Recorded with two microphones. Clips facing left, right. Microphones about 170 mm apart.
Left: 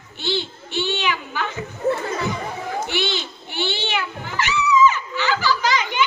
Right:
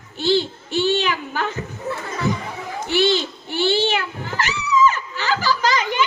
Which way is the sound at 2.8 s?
40° right (ahead or behind).